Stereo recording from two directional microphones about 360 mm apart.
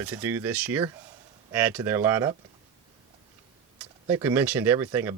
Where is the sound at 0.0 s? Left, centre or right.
Centre.